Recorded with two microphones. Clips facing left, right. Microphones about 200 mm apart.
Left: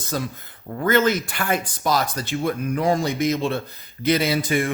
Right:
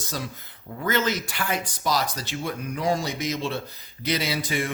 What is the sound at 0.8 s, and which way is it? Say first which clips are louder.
Speech: left 6 dB; 55° left (ahead or behind).